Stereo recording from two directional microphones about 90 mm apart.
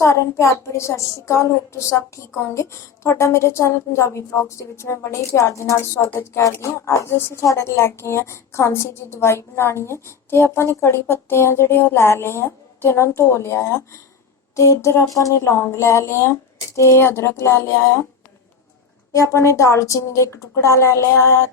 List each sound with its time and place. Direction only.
0.0 s a woman's voice: 30° left (ahead or behind)
19.1 s a woman's voice: 35° left (ahead or behind)